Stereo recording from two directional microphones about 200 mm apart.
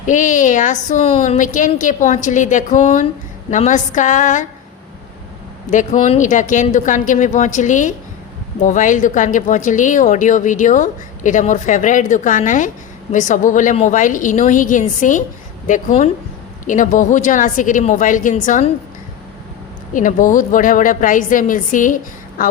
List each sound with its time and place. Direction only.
0.1 s speech: 40° left (ahead or behind)
5.7 s speech: 40° left (ahead or behind)
19.9 s speech: 40° left (ahead or behind)